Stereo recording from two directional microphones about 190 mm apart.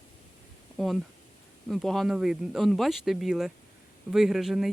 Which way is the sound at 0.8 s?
Centre (ahead or behind).